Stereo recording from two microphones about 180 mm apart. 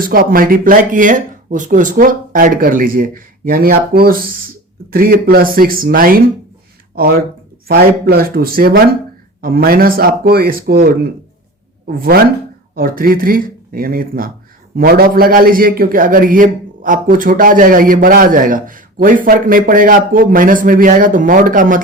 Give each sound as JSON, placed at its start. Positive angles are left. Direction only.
{"t": 0.0, "sound": "a man's voice", "side_deg": -55}
{"t": 7.7, "sound": "a man's voice", "side_deg": -55}